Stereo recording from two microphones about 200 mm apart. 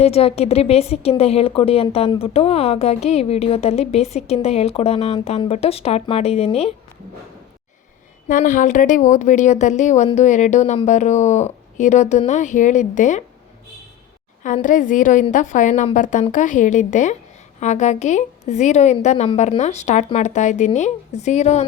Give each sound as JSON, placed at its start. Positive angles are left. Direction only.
{"t": 0.0, "sound": "a woman's voice", "side_deg": 30}
{"t": 8.3, "sound": "a woman's voice", "side_deg": 40}
{"t": 14.4, "sound": "a woman's voice", "side_deg": 40}